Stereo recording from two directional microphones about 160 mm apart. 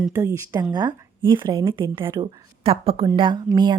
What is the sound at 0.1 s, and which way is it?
A woman's voice, 20° right (ahead or behind).